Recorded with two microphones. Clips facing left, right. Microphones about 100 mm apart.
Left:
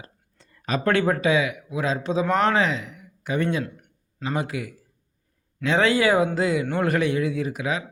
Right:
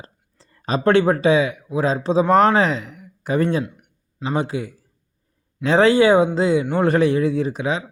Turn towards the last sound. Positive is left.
turn(degrees=-30)  # may be behind; listen again after turning